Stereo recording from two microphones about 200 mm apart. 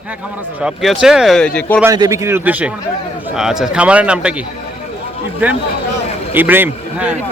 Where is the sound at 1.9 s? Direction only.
15° right (ahead or behind).